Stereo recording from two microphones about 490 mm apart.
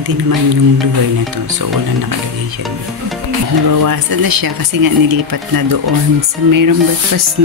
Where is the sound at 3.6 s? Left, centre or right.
Right.